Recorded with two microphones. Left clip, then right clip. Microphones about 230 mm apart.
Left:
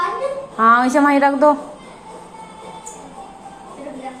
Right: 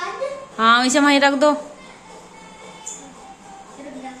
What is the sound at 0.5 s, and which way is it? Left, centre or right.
A woman's voice, right.